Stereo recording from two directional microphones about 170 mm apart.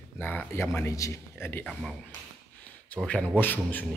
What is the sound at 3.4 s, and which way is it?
Speech, 10° left (ahead or behind).